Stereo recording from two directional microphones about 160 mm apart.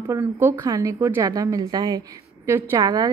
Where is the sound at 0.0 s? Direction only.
15° right (ahead or behind).